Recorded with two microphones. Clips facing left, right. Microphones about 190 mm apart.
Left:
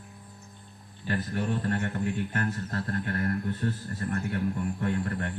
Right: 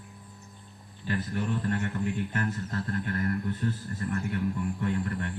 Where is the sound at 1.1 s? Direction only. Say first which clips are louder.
Left 1 dB; 40° left (ahead or behind).